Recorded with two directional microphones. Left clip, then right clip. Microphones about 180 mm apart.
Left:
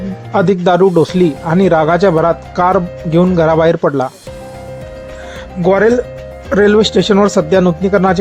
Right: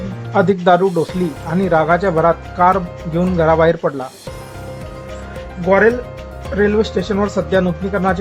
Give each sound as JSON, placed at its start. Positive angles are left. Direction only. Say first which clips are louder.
{"t": 0.3, "sound": "speech", "louder": "left 2 dB", "side_deg": 25}
{"t": 5.6, "sound": "speech", "louder": "left 3 dB", "side_deg": 45}